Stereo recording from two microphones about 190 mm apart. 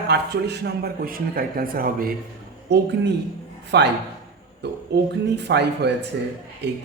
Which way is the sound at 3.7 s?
60° right (ahead or behind).